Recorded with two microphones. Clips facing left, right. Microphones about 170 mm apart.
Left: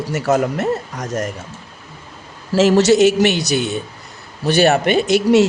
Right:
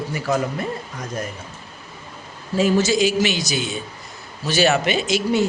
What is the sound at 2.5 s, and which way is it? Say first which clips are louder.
Speech: left 6 dB; 80° left.